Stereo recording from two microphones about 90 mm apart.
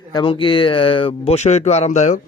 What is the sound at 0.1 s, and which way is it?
Speech, 65° left (ahead or behind).